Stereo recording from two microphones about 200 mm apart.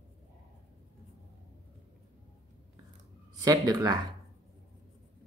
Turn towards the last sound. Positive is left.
turn(degrees=-20)  # may be behind; listen again after turning